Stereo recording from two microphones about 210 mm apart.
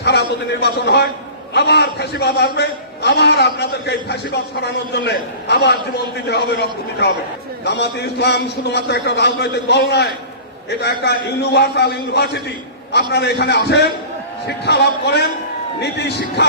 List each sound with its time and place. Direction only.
0.0 s a man's voice: 55° left (ahead or behind)